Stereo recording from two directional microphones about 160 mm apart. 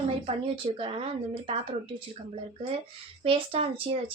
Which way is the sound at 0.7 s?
35° right (ahead or behind).